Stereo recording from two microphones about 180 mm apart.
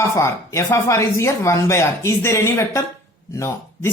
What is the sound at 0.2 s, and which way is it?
Speech, 15° left (ahead or behind).